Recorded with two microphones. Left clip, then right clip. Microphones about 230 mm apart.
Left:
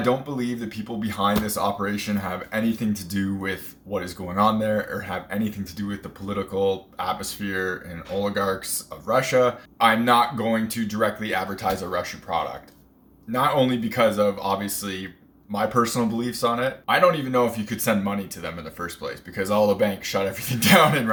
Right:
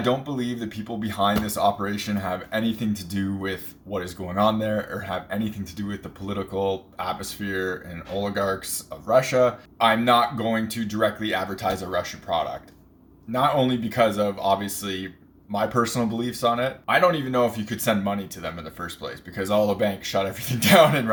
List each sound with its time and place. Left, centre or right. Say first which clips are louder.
0.0 s speech: left 1 dB; centre